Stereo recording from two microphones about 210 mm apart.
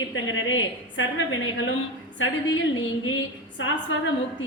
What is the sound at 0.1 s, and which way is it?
A woman's voice, 65° left (ahead or behind).